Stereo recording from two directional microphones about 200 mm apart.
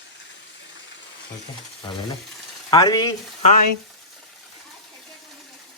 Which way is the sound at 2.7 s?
20° left (ahead or behind).